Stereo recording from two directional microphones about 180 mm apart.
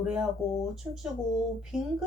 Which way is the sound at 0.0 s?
5° right (ahead or behind).